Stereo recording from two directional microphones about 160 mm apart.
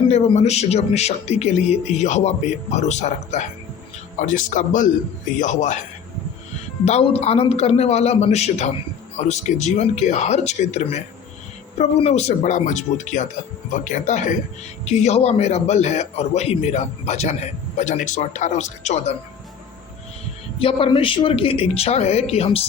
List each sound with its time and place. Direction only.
0.1 s a man's voice: 40° left (ahead or behind)
6.8 s a woman's voice: 40° left (ahead or behind)
20.6 s a woman's voice: 35° left (ahead or behind)